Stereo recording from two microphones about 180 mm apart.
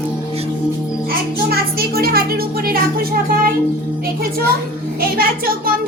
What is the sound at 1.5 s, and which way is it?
A child's voice, 60° right (ahead or behind).